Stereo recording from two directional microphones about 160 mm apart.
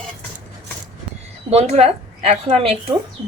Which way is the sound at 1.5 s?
40° right (ahead or behind).